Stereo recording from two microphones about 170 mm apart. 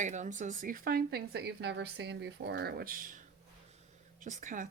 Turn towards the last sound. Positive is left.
turn(degrees=-50)  # may be behind; listen again after turning